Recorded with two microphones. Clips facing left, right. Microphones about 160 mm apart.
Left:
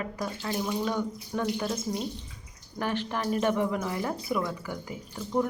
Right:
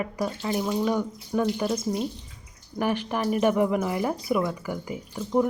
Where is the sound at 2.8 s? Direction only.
15° right (ahead or behind).